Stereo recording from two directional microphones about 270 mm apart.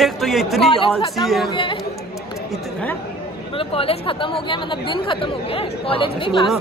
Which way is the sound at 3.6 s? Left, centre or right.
Left.